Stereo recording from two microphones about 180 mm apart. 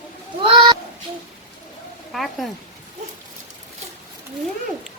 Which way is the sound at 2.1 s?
Centre (ahead or behind).